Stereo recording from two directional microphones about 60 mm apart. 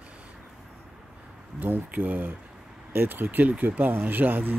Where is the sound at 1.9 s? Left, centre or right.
Right.